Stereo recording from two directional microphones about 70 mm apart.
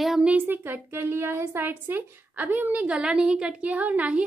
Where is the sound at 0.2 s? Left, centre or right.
Right.